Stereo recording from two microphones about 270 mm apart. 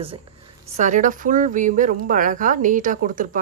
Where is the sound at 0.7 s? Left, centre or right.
Right.